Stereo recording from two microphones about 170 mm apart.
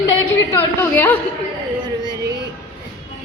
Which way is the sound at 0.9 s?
10° left (ahead or behind).